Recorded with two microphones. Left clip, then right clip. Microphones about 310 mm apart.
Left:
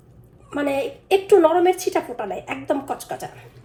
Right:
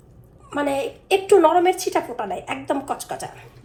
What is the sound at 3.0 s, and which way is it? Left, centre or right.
Speech, right.